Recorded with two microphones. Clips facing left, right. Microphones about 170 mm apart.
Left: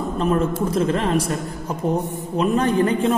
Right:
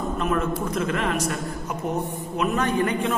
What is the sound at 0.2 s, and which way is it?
A man's voice, 30° left (ahead or behind).